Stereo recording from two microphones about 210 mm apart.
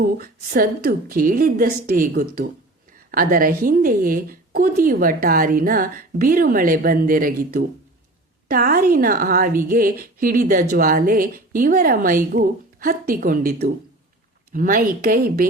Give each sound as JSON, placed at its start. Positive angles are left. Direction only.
{"t": 0.0, "sound": "a woman's voice", "side_deg": -40}